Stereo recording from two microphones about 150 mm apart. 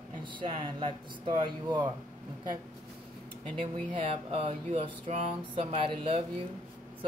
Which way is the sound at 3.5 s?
35° right (ahead or behind).